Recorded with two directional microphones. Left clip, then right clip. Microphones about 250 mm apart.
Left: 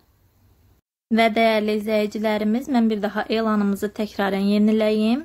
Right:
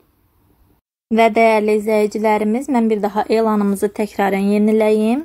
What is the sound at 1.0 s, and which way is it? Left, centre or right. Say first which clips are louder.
A woman's voice: right 5 dB; centre.